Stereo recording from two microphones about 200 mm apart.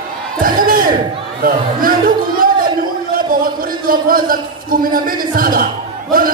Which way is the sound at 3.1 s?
45° right (ahead or behind).